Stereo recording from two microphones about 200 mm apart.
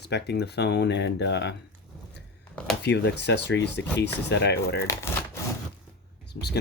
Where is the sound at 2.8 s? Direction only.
55° left (ahead or behind).